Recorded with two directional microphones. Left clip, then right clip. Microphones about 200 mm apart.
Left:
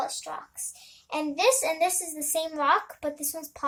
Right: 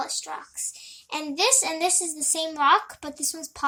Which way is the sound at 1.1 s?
35° right (ahead or behind).